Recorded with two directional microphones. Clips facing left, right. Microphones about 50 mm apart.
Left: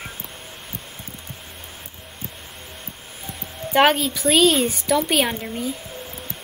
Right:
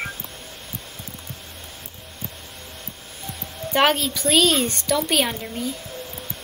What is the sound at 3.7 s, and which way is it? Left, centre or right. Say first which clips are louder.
A woman's voice: left 2 dB; centre.